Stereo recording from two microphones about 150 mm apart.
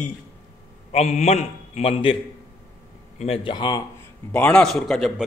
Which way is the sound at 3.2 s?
35° left (ahead or behind).